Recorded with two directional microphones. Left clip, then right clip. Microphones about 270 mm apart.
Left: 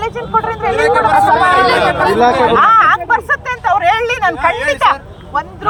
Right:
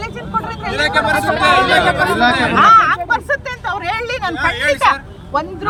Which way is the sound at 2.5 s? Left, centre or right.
Centre.